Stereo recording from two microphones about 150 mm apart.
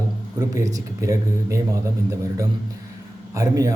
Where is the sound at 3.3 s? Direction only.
25° right (ahead or behind).